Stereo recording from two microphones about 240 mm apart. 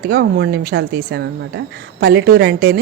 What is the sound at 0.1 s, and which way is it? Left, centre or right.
A woman's voice, right.